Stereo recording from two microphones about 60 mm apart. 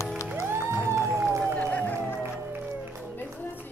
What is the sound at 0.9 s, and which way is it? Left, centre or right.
Run, right.